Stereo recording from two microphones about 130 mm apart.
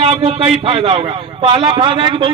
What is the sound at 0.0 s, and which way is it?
A man's voice, 50° right (ahead or behind).